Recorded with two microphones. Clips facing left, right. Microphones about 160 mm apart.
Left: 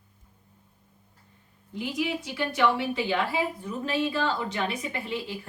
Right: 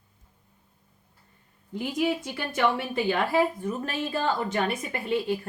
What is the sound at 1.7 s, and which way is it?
A woman's voice, 50° right (ahead or behind).